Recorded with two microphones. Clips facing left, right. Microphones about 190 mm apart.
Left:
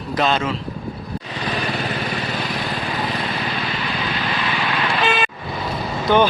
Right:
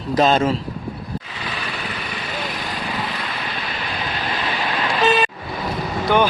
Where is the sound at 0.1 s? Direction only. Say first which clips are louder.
Right 4 dB; 40° right (ahead or behind).